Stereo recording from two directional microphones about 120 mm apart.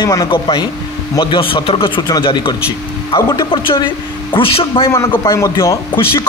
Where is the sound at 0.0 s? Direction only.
30° left (ahead or behind); by 4.8 s 50° left (ahead or behind).